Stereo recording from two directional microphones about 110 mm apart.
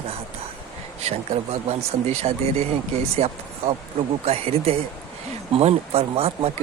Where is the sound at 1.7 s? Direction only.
70° right (ahead or behind).